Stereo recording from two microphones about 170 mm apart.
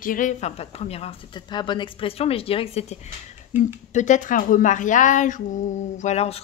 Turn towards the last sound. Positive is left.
turn(degrees=40)  # may be behind; listen again after turning